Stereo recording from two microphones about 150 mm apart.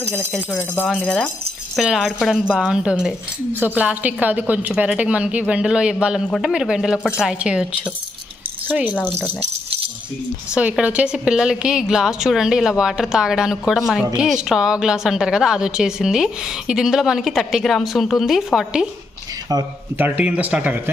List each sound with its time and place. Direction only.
0.3 s a woman's voice: centre (ahead or behind)
10.5 s a woman's voice: 10° right (ahead or behind)
19.5 s speech: 25° right (ahead or behind)
20.0 s a woman's voice: 10° right (ahead or behind)